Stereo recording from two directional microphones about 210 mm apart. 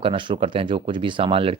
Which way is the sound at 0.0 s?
25° right (ahead or behind).